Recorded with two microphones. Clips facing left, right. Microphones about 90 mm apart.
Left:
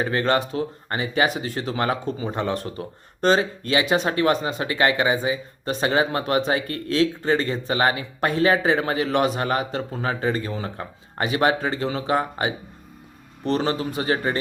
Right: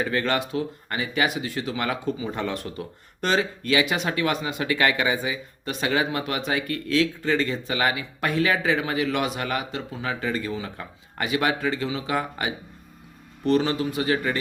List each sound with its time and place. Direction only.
0.0 s speech: 30° left (ahead or behind)